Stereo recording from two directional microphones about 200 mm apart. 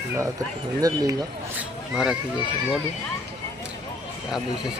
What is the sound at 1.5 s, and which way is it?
Speech, 5° right (ahead or behind).